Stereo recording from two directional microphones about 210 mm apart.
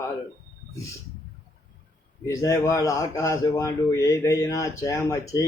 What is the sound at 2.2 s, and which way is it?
A man's voice, 15° left (ahead or behind).